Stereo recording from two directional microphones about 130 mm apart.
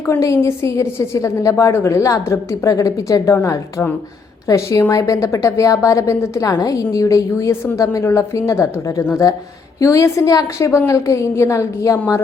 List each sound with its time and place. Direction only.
0.1 s a woman's voice: 20° left (ahead or behind)